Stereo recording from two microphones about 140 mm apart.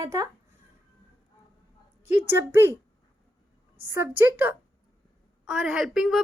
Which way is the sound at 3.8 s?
15° right (ahead or behind).